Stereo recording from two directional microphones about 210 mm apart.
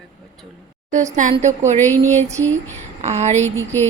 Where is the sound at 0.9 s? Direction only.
35° right (ahead or behind).